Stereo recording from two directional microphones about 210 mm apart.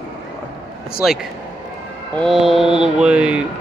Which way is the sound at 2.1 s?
Centre (ahead or behind).